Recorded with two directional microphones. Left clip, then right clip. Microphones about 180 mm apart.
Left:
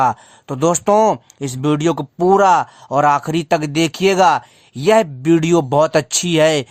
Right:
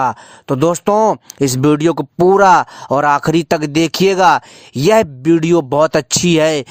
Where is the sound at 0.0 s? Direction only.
30° right (ahead or behind).